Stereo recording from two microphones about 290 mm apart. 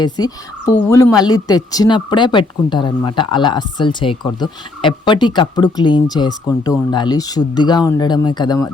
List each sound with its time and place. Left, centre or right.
0.2 s speech: left
0.9 s speech: centre